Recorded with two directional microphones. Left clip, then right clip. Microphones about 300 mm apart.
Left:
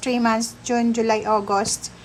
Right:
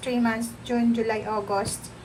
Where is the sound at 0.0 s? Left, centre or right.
Centre.